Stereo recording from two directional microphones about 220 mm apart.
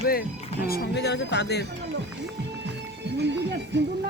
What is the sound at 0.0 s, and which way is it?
Speech, 45° left (ahead or behind).